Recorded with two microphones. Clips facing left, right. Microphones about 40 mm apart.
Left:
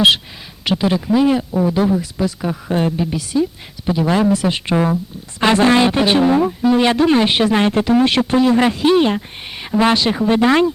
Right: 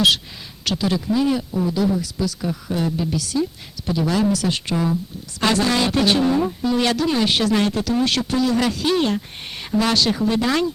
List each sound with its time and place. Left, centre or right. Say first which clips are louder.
0.6 s a man's voice: left 5 dB; left
4.7 s a man's voice: left 5 dB; left